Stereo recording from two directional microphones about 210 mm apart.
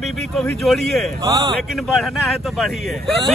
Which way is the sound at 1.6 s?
Centre (ahead or behind).